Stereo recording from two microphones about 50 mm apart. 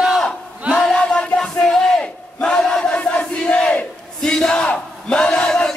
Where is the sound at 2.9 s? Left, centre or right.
Left.